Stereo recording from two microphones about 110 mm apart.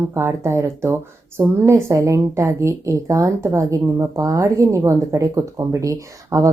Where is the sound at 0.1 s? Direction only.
25° right (ahead or behind).